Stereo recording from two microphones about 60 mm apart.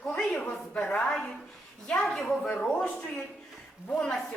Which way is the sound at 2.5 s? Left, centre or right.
Left.